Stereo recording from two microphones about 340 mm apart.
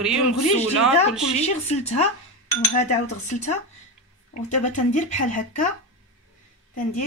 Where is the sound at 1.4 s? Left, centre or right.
Centre.